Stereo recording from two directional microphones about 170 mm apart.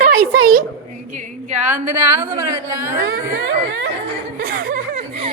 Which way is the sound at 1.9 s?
15° right (ahead or behind).